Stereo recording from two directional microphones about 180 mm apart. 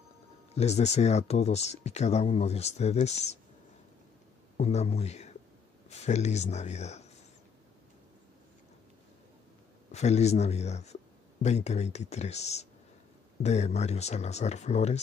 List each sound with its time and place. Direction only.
0.6 s speech: 40° left (ahead or behind)
4.6 s speech: 35° left (ahead or behind)
9.9 s speech: 40° left (ahead or behind)